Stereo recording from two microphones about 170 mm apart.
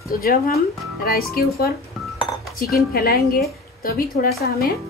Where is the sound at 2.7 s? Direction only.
60° left (ahead or behind).